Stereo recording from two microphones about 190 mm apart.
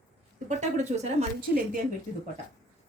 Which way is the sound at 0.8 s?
35° right (ahead or behind).